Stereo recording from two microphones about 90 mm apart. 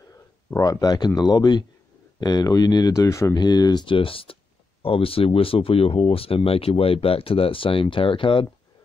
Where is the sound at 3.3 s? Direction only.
50° left (ahead or behind); by 8.4 s 70° left (ahead or behind).